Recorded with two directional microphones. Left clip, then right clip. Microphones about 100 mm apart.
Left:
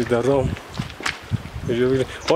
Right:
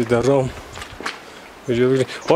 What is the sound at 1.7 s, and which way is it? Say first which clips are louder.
Speech: right 3 dB; 25° right (ahead or behind).